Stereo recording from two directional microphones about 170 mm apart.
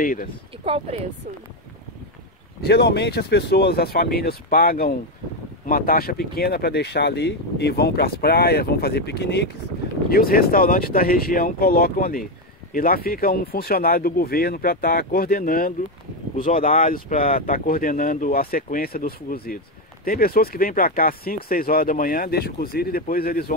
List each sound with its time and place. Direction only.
0.0 s speech: 55° left (ahead or behind)
0.7 s speech: 35° right (ahead or behind)
2.6 s speech: 75° left (ahead or behind)
10.1 s speech: 60° left (ahead or behind)